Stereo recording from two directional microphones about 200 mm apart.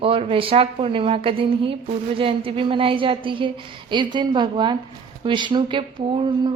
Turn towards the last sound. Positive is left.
turn(degrees=-25)  # may be behind; listen again after turning